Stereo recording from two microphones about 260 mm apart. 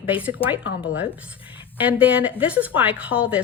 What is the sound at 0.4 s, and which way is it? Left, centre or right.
Speech, left.